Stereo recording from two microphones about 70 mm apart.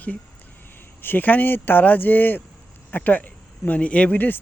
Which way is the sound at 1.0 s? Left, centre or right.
Left.